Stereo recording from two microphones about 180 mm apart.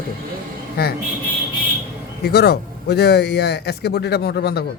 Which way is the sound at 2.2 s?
65° left (ahead or behind).